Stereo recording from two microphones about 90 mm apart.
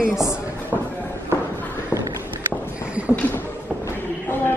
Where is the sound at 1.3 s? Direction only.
25° left (ahead or behind).